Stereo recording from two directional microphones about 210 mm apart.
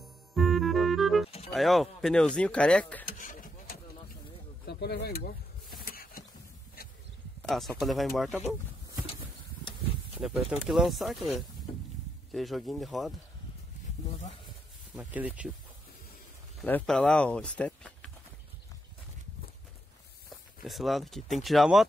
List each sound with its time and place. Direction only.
0.3 s music: centre (ahead or behind)
1.5 s speech: centre (ahead or behind)
3.1 s a sound: 40° left (ahead or behind)
4.6 s speech: 50° left (ahead or behind)
5.9 s a sound: 45° left (ahead or behind)
7.4 s speech: centre (ahead or behind)
10.2 s speech: centre (ahead or behind)
15.0 s speech: 5° right (ahead or behind)
16.6 s speech: 5° left (ahead or behind)
20.6 s speech: centre (ahead or behind)